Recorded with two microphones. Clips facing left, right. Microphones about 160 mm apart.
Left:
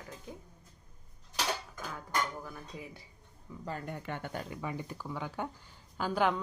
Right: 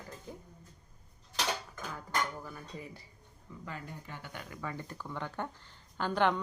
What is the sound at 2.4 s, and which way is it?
Speech, centre (ahead or behind).